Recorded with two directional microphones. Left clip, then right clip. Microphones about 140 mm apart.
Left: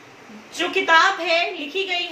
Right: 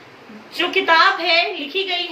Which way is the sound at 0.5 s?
15° right (ahead or behind).